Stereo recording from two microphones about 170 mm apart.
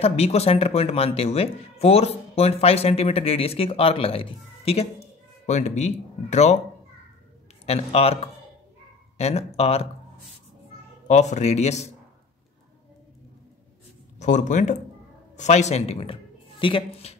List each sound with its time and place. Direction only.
0.0 s speech: 35° left (ahead or behind)
7.6 s speech: 35° left (ahead or behind)
11.1 s speech: 45° left (ahead or behind)
14.1 s speech: 45° left (ahead or behind)